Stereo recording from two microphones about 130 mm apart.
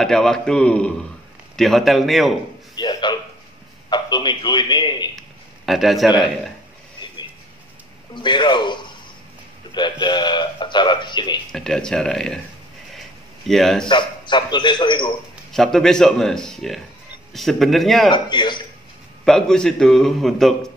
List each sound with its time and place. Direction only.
0.0 s a man's voice: 5° left (ahead or behind)
2.7 s a sound: 30° left (ahead or behind)
3.9 s a man's voice: 35° left (ahead or behind)
5.7 s a man's voice: centre (ahead or behind)
8.1 s a man's voice: 35° left (ahead or behind)
11.5 s a man's voice: 5° left (ahead or behind)
13.5 s a man's voice: centre (ahead or behind)
13.8 s a man's voice: 35° left (ahead or behind)
15.5 s a man's voice: 5° left (ahead or behind)
18.1 s a man's voice: 35° left (ahead or behind)
19.2 s a man's voice: 5° left (ahead or behind)